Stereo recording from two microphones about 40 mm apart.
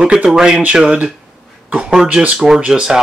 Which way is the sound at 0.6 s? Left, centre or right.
Right.